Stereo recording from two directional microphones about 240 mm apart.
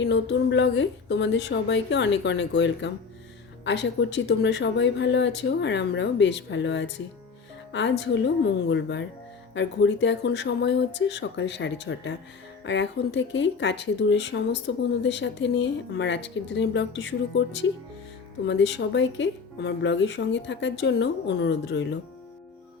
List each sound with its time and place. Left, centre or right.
0.0 s speech: left